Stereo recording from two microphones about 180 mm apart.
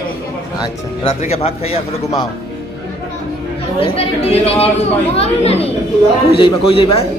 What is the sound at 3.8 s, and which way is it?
Speech, 35° left (ahead or behind).